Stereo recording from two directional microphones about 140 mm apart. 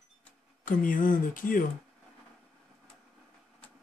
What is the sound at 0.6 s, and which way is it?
Speech, 75° left (ahead or behind).